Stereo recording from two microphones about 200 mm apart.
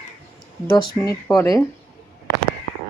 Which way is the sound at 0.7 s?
20° left (ahead or behind).